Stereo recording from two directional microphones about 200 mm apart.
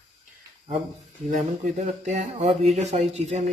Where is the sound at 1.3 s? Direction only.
40° right (ahead or behind).